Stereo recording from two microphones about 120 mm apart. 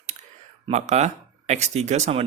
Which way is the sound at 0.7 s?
75° right (ahead or behind).